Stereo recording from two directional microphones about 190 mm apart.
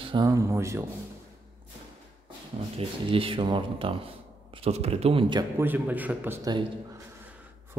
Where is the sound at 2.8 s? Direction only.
30° right (ahead or behind).